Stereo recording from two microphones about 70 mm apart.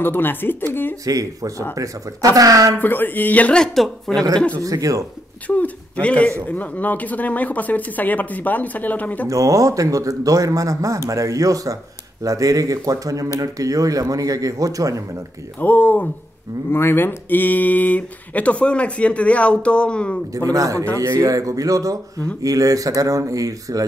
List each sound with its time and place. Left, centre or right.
0.0 s speech: left
1.0 s speech: right
2.8 s speech: left
3.5 s speech: centre
4.6 s speech: right
5.5 s speech: centre
9.3 s speech: right
15.6 s speech: left
20.5 s speech: right